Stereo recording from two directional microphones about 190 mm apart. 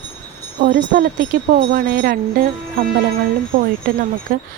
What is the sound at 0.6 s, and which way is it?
Speech, 50° right (ahead or behind).